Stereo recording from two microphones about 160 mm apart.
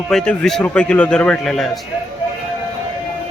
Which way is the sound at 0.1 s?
5° left (ahead or behind).